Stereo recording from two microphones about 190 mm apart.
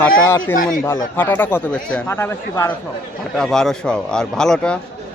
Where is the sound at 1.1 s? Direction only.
10° left (ahead or behind).